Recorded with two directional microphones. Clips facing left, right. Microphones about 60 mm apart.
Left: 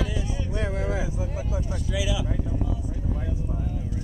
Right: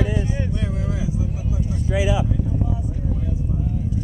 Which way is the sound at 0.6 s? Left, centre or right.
Left.